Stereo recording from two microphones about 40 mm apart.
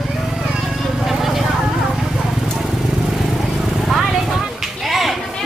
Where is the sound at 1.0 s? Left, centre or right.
Centre.